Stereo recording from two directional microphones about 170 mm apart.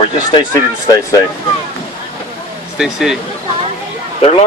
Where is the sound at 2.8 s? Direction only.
5° right (ahead or behind).